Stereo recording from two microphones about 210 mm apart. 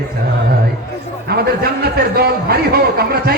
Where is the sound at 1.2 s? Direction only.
50° right (ahead or behind).